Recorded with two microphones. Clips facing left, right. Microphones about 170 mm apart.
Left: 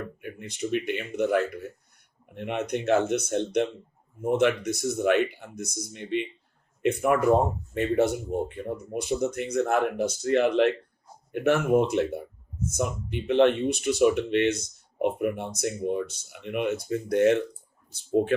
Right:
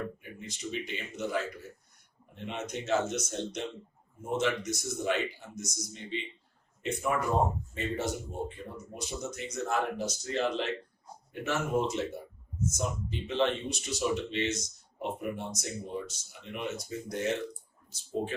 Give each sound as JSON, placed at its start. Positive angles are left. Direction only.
{"t": 0.2, "sound": "speech", "side_deg": 60}